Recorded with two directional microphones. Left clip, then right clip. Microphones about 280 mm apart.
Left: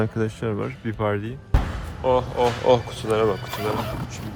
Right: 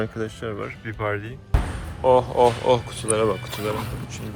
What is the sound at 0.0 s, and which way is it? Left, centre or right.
Speech, right.